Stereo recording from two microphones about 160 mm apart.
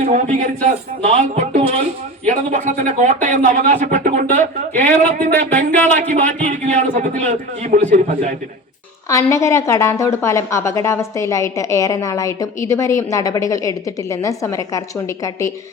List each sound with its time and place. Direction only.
0.0 s speech: 50° right (ahead or behind)
5.7 s speech: 10° left (ahead or behind)
6.1 s speech: 45° right (ahead or behind)
9.0 s a woman's voice: 20° left (ahead or behind)